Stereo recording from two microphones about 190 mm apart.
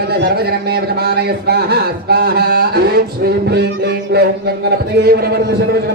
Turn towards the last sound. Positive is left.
turn(degrees=-55)  # may be behind; listen again after turning